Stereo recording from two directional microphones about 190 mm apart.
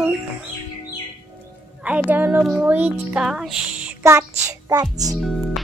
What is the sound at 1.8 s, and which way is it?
Speech, 5° right (ahead or behind).